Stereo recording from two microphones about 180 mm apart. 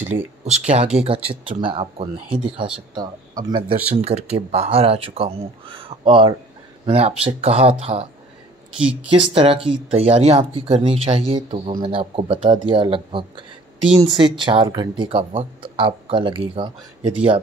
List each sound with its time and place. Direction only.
0.5 s speech: 35° right (ahead or behind)
8.7 s speech: 5° right (ahead or behind)
9.3 s speech: 30° right (ahead or behind)